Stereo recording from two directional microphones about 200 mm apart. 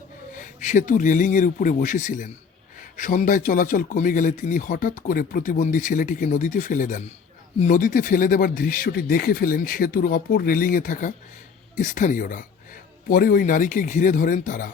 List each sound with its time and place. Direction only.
0.3 s speech: 40° left (ahead or behind)